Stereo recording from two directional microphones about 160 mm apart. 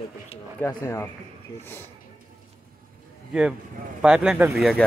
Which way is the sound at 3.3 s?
5° right (ahead or behind).